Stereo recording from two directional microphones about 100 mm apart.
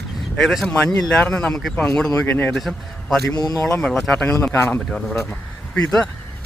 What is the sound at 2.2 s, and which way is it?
Speech, 25° left (ahead or behind).